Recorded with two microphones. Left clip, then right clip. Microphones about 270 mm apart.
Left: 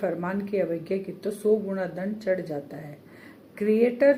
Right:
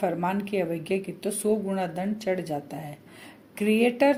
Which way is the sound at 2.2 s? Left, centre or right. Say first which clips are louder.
Left 2 dB; right.